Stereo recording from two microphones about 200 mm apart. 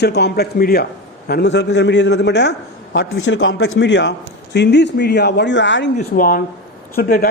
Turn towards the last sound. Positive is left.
turn(degrees=45)  # may be behind; listen again after turning